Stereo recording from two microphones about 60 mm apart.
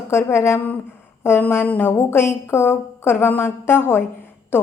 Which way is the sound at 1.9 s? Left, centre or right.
Left.